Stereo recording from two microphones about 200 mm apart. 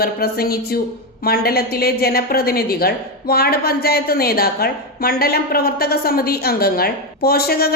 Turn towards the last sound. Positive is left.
turn(degrees=50)  # may be behind; listen again after turning